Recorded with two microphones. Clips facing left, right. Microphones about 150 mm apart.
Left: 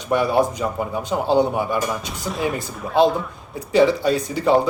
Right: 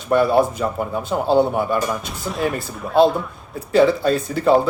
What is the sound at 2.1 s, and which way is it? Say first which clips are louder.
Speech: right 1 dB; centre (ahead or behind).